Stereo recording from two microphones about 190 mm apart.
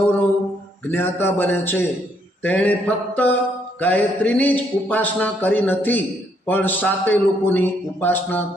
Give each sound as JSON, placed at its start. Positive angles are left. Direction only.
{"t": 0.9, "sound": "a man's voice", "side_deg": 10}